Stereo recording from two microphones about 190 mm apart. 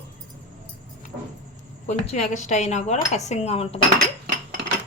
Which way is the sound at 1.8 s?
35° left (ahead or behind).